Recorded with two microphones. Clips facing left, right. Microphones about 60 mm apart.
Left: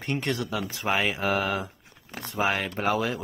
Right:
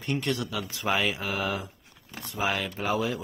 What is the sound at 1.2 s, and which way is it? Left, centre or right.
Speech, left.